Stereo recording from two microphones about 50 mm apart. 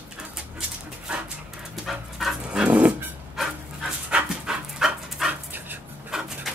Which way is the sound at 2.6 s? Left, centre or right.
Right.